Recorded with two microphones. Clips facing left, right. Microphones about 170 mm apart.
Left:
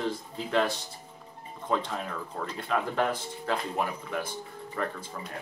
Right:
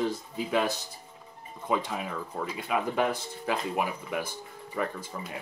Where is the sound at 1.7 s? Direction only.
10° right (ahead or behind).